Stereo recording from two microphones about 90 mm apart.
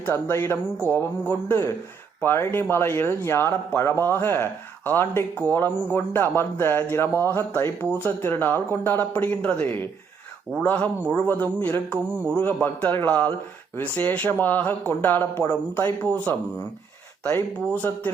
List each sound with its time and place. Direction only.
0.0 s speech: 25° left (ahead or behind)